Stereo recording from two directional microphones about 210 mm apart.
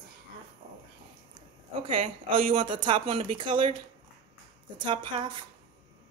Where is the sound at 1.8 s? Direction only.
25° right (ahead or behind).